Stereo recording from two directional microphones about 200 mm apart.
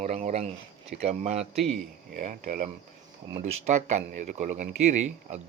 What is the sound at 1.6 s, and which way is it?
Speech, centre (ahead or behind).